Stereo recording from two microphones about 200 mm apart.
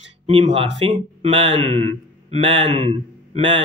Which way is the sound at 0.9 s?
30° right (ahead or behind).